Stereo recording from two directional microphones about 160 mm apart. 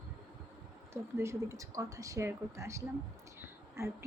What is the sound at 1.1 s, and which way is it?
Speech, 15° right (ahead or behind).